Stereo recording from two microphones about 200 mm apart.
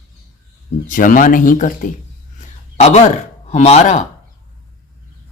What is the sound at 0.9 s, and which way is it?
A man's voice, 40° left (ahead or behind).